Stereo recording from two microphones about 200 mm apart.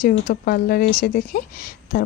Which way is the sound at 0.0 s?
45° left (ahead or behind).